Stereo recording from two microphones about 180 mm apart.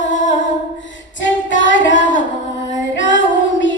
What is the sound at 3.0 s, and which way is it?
Female singing, 90° left.